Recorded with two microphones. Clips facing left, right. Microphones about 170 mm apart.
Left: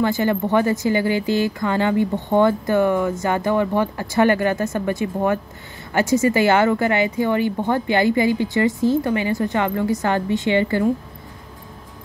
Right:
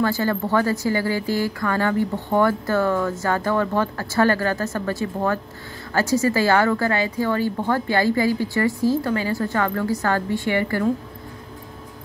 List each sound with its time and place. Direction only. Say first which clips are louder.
0.0 s speech: left 2 dB; 20° left (ahead or behind)